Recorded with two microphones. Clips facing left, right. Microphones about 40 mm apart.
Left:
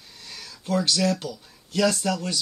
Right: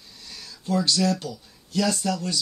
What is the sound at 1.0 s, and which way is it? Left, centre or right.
Speech, left.